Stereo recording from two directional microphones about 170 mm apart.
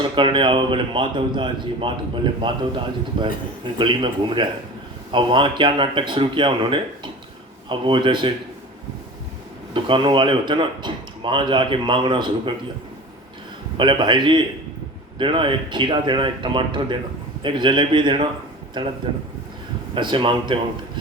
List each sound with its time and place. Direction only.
0.2 s a man's voice: 30° right (ahead or behind)
9.7 s a man's voice: 30° right (ahead or behind)
13.7 s a man's voice: 30° right (ahead or behind)
19.9 s a man's voice: 30° right (ahead or behind)